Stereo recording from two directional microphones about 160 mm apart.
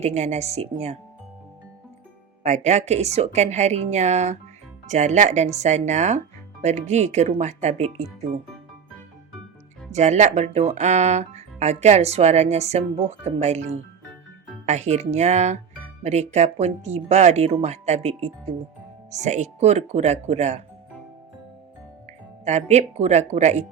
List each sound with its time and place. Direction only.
0.0 s speech: 45° right (ahead or behind)
2.4 s speech: 45° right (ahead or behind)
9.9 s speech: 45° right (ahead or behind)
19.1 s speech: 45° right (ahead or behind)
22.4 s speech: 45° right (ahead or behind)